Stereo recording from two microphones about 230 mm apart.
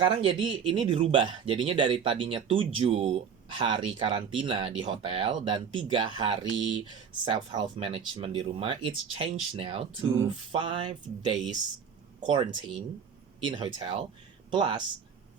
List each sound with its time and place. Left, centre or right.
0.0 s speech: right